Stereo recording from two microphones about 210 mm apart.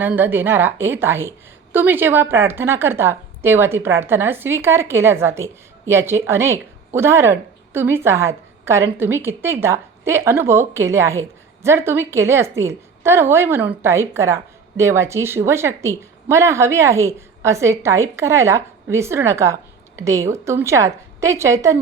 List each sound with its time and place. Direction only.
0.0 s speech: 10° right (ahead or behind)